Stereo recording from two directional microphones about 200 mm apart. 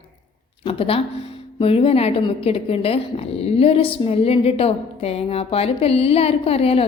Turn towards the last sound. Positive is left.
turn(degrees=30)  # may be behind; listen again after turning